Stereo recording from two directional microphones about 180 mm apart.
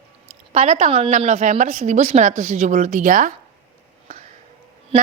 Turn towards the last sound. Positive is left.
turn(degrees=-30)  # may be behind; listen again after turning